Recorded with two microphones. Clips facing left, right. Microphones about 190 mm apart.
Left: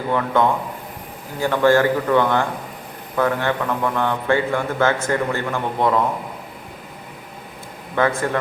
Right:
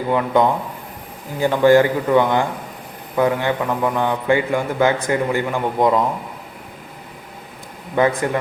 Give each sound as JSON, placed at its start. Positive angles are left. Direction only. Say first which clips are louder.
{"t": 0.1, "sound": "a man's voice", "louder": "right 2 dB", "side_deg": -15}
{"t": 7.9, "sound": "a man's voice", "louder": "right 2 dB", "side_deg": -15}